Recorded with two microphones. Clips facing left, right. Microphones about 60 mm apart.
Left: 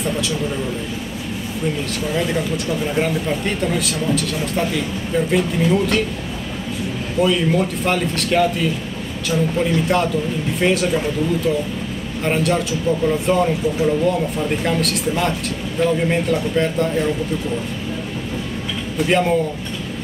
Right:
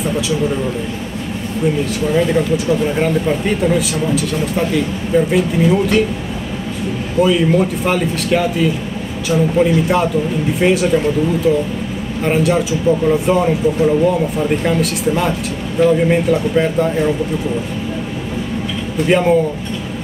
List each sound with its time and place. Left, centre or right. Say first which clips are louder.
0.0 s speech: right 4 dB; centre
2.0 s speech: right 6 dB; centre
7.2 s speech: right 4 dB; centre
18.9 s speech: right 4 dB; centre